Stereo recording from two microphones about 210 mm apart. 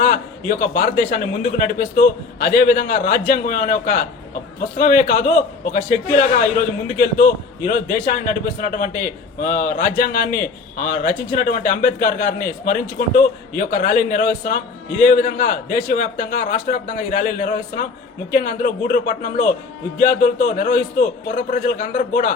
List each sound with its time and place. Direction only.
0.0 s a man's voice: 40° left (ahead or behind)